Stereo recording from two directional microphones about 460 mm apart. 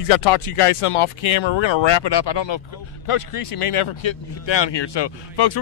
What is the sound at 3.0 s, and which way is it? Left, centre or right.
Speech, left.